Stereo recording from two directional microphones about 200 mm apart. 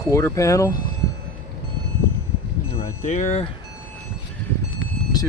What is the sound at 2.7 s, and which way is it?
Speech, 35° left (ahead or behind).